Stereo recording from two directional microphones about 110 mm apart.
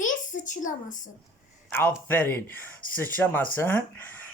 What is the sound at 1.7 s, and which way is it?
A man's voice, 15° left (ahead or behind).